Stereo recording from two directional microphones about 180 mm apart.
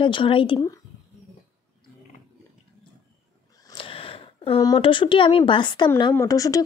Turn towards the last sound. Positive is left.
turn(degrees=20)  # may be behind; listen again after turning